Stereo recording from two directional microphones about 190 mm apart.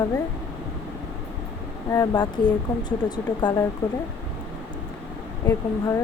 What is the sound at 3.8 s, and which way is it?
Speech, 10° left (ahead or behind).